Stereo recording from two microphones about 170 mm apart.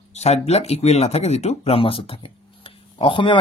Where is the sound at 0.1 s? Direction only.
40° left (ahead or behind).